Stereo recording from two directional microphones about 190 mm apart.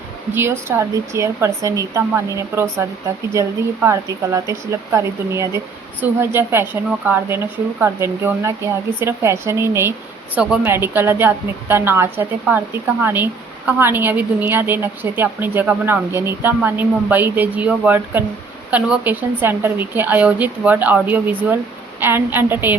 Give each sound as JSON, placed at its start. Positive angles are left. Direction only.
{"t": 0.3, "sound": "a woman's voice", "side_deg": -15}